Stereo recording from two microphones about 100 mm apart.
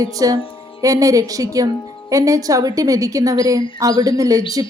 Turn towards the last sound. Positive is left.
turn(degrees=-35)  # may be behind; listen again after turning